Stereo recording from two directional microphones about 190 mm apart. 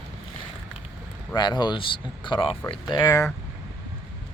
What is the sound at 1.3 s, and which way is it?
Speech, 25° left (ahead or behind).